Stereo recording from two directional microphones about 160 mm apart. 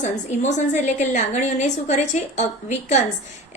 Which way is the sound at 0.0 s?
45° left (ahead or behind).